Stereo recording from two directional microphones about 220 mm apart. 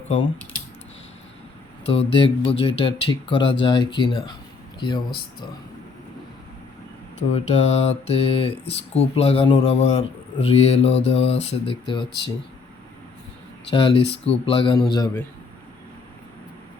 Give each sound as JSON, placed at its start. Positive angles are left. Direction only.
{"t": 1.9, "sound": "speech", "side_deg": 25}
{"t": 7.2, "sound": "speech", "side_deg": 30}
{"t": 13.7, "sound": "a man's voice", "side_deg": 25}